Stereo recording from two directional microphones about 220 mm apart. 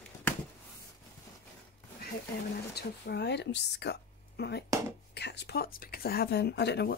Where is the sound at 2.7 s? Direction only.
50° left (ahead or behind).